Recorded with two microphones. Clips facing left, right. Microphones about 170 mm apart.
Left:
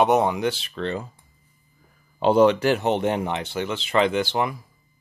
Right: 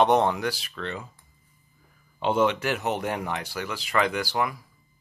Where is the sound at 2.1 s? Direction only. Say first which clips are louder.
Left 6 dB; 35° left (ahead or behind).